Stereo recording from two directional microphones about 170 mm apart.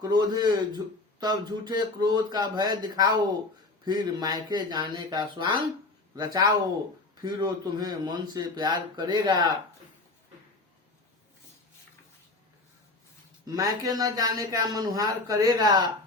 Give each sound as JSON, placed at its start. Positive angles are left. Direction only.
{"t": 0.0, "sound": "speech", "side_deg": -25}
{"t": 13.5, "sound": "speech", "side_deg": -20}